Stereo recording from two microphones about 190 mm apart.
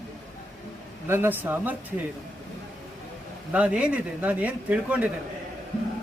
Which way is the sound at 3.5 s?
5° right (ahead or behind).